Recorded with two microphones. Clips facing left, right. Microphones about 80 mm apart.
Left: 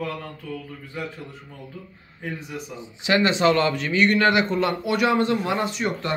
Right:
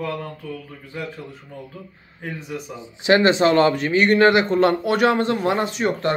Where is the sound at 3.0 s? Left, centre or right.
Right.